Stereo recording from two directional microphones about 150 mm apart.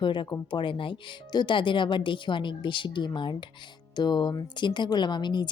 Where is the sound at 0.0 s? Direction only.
30° left (ahead or behind).